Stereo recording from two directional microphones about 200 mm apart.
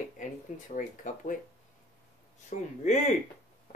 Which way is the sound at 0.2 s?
40° left (ahead or behind).